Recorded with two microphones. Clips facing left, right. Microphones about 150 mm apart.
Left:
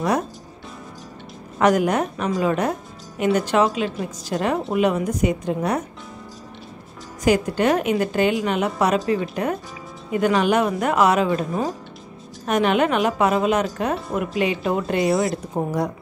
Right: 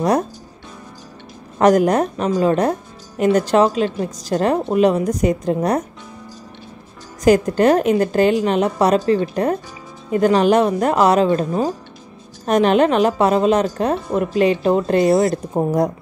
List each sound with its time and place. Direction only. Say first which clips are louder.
1.6 s speech: right 4 dB; 40° right (ahead or behind)
7.2 s speech: right 5 dB; 45° right (ahead or behind)
15.0 s speech: right 4 dB; centre (ahead or behind)
15.5 s a woman's voice: right 5 dB; 20° right (ahead or behind)